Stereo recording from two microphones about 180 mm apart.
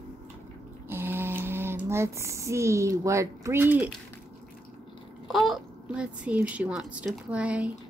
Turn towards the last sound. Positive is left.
turn(degrees=-5)  # may be behind; listen again after turning